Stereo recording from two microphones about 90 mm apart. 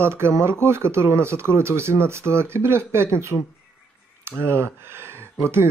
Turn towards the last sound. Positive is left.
turn(degrees=-30)  # may be behind; listen again after turning